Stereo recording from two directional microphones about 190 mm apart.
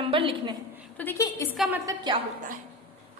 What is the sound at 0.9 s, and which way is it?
Speech, 15° left (ahead or behind).